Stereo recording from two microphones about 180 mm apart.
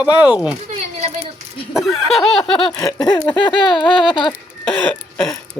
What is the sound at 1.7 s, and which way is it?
Speech, centre (ahead or behind).